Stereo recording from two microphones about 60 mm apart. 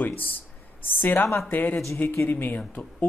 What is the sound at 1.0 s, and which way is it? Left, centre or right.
Speech, left.